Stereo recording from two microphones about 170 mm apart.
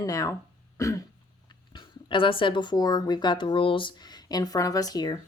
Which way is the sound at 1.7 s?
30° left (ahead or behind).